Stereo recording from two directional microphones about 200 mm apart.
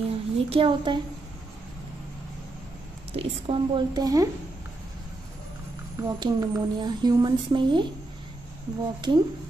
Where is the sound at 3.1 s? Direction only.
30° right (ahead or behind).